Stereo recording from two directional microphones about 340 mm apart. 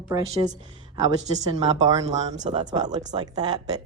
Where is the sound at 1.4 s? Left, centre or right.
Centre.